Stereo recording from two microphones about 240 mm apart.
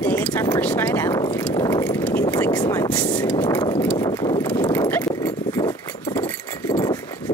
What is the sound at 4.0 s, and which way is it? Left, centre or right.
Clip-clop, centre.